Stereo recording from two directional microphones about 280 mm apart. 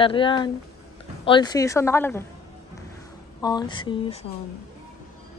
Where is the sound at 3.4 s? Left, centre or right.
Centre.